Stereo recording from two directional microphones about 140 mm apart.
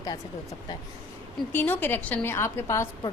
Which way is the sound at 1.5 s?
10° left (ahead or behind).